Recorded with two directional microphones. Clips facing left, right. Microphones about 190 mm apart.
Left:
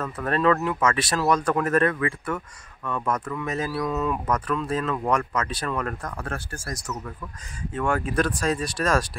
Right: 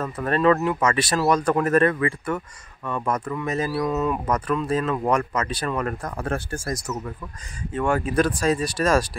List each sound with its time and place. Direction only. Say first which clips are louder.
0.0 s speech: right 2 dB; 5° right (ahead or behind)
6.0 s speech: right 5 dB; 20° right (ahead or behind)
7.7 s speech: right 3 dB; centre (ahead or behind)